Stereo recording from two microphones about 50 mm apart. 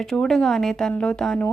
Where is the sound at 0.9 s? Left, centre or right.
Left.